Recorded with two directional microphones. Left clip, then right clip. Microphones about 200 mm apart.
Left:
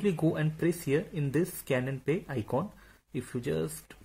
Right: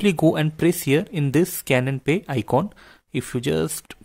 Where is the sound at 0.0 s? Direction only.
45° right (ahead or behind).